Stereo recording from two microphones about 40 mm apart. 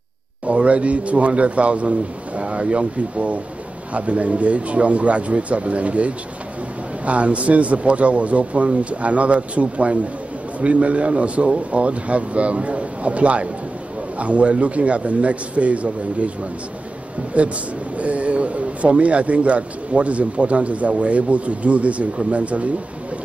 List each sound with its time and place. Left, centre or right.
0.5 s speech: right
17.9 s speech: right